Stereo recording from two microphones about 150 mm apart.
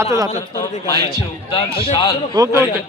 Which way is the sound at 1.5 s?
35° left (ahead or behind).